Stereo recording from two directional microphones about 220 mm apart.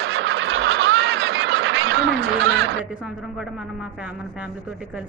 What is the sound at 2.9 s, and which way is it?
Speech, 5° right (ahead or behind).